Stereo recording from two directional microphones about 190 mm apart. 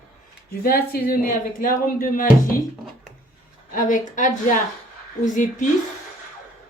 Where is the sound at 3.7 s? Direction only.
45° left (ahead or behind).